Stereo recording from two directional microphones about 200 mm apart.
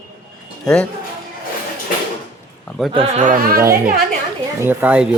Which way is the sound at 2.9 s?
30° right (ahead or behind).